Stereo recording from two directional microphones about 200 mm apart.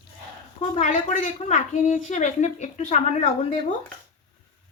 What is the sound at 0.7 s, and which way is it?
A woman's voice, 40° left (ahead or behind).